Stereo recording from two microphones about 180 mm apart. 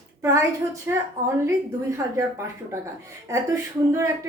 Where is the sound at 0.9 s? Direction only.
15° right (ahead or behind).